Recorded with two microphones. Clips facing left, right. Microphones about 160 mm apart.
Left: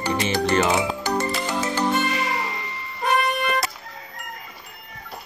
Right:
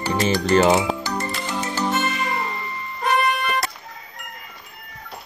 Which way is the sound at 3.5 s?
Centre (ahead or behind).